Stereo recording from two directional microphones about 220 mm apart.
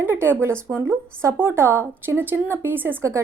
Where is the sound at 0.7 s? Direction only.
10° right (ahead or behind).